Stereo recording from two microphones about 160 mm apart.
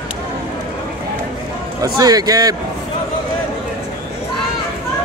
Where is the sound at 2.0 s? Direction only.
25° right (ahead or behind).